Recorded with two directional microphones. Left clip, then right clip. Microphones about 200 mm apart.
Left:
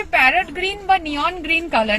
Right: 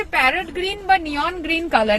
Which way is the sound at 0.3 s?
20° right (ahead or behind).